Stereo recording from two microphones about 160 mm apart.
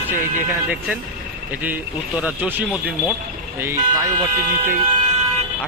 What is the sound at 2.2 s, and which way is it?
Speech, 10° right (ahead or behind).